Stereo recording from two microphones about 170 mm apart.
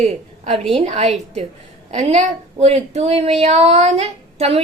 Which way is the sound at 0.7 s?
35° right (ahead or behind).